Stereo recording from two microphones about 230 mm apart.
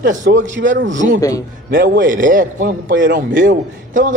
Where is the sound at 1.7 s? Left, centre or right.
Right.